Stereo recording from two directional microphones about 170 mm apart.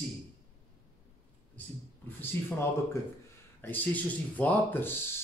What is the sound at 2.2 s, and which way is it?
A man's voice, 10° left (ahead or behind).